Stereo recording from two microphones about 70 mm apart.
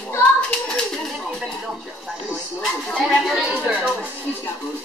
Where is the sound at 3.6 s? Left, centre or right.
Centre.